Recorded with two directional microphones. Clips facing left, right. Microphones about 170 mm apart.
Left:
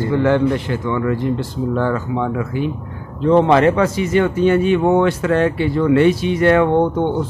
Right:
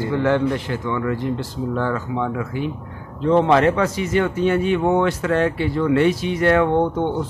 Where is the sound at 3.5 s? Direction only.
65° left (ahead or behind).